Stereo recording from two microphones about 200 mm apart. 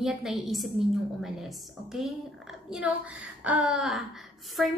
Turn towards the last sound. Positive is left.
turn(degrees=0)  # may be behind; listen again after turning